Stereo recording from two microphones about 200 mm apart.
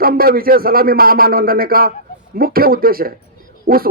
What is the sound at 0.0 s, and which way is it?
A man's voice, 50° right (ahead or behind).